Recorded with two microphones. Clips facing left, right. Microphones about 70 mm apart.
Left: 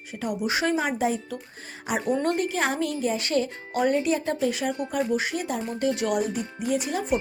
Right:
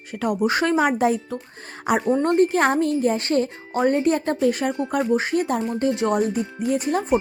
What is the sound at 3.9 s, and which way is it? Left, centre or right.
Speech, right.